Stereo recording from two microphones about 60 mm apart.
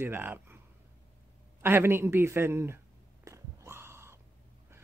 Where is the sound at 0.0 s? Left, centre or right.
Right.